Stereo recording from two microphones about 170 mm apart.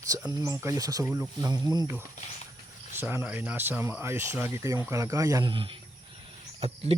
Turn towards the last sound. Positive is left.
turn(degrees=-35)  # may be behind; listen again after turning